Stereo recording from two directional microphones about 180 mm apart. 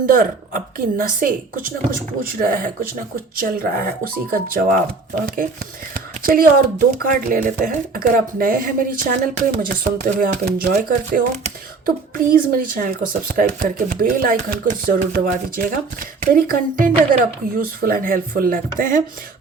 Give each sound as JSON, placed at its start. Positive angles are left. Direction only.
{"t": 0.0, "sound": "speech", "side_deg": -50}
{"t": 5.9, "sound": "speech", "side_deg": -50}